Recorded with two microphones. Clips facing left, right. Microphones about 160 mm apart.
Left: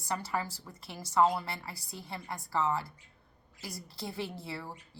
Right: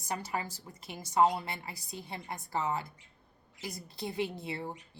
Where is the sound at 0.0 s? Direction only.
20° right (ahead or behind).